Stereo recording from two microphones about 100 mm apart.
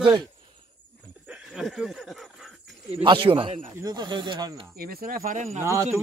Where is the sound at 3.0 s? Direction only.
55° right (ahead or behind).